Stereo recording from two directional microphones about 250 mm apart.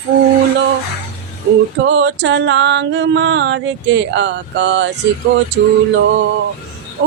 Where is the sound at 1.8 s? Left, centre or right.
Right.